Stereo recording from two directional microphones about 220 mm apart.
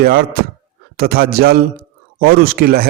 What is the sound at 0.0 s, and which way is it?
Speech, 45° right (ahead or behind).